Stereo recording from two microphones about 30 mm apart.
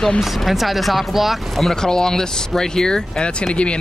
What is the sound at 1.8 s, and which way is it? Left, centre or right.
Speech, left.